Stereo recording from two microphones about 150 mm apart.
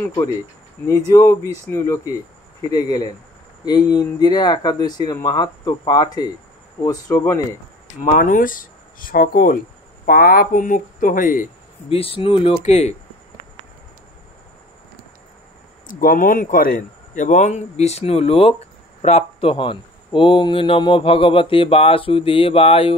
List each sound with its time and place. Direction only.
0.0 s speech: 20° left (ahead or behind)
8.0 s speech: 60° left (ahead or behind)
11.9 s speech: 40° left (ahead or behind)
15.9 s speech: 70° left (ahead or behind); by 22.9 s 40° left (ahead or behind)